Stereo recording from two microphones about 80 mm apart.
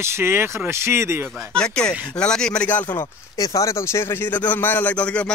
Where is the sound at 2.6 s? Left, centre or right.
Left.